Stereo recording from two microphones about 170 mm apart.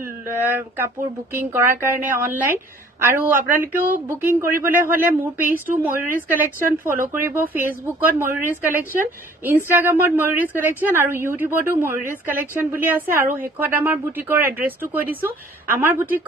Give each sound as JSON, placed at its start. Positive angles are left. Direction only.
{"t": 0.0, "sound": "a woman's voice", "side_deg": -15}